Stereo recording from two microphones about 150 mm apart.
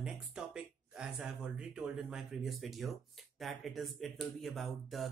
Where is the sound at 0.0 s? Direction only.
5° right (ahead or behind).